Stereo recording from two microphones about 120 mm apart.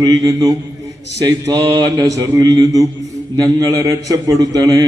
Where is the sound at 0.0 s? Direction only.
30° right (ahead or behind).